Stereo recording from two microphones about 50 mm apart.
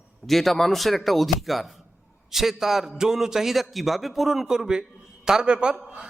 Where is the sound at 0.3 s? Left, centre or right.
Centre.